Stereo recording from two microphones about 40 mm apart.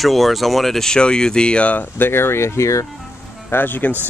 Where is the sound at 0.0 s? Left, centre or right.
Centre.